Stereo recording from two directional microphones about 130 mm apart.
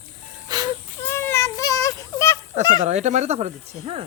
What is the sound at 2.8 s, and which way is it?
Speech, 60° right (ahead or behind).